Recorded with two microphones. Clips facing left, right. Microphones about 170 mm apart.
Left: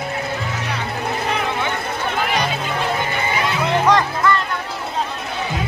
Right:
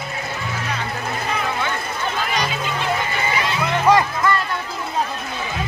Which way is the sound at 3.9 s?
10° right (ahead or behind).